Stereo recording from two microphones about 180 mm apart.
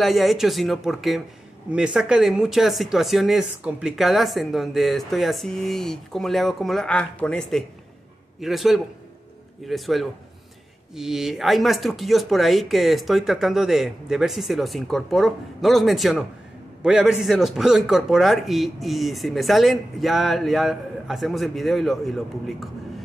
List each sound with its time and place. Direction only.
0.0 s speech: centre (ahead or behind)